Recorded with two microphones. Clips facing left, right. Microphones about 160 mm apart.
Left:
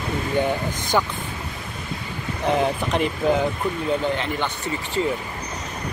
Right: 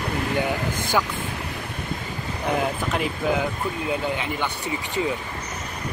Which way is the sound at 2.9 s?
Centre (ahead or behind).